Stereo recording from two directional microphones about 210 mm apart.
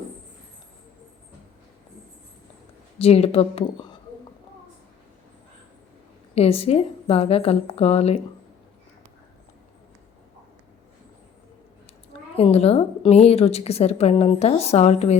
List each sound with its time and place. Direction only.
3.0 s a woman's voice: 30° left (ahead or behind)
6.3 s a woman's voice: 30° left (ahead or behind)
12.4 s a woman's voice: 30° left (ahead or behind)